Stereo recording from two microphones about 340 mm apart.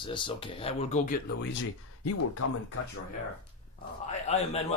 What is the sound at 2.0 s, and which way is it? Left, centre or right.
Speech, left.